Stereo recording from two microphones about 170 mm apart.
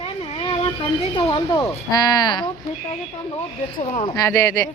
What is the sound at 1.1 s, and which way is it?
Speech, 25° left (ahead or behind).